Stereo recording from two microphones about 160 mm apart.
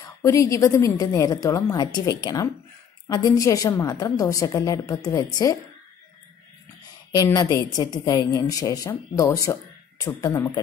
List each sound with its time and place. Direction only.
0.0 s a woman's voice: 20° left (ahead or behind)
7.2 s a woman's voice: 25° left (ahead or behind)